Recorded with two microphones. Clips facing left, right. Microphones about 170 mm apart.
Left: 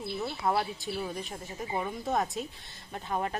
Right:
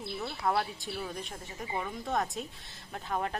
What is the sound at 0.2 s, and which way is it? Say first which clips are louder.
Speech: left 1 dB; 5° left (ahead or behind).